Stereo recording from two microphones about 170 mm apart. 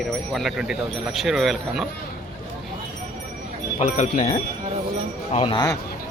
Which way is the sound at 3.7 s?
45° left (ahead or behind).